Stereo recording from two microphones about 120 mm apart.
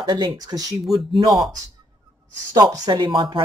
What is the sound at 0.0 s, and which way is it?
Speech, 35° right (ahead or behind).